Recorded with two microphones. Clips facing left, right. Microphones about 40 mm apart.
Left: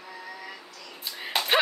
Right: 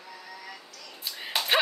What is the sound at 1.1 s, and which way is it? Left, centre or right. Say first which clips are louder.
Slap: left 1 dB; centre.